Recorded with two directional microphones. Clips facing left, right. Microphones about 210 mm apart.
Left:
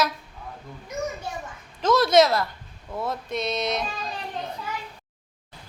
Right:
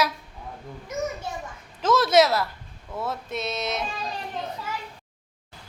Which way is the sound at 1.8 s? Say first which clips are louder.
Left 1 dB; 5° right (ahead or behind).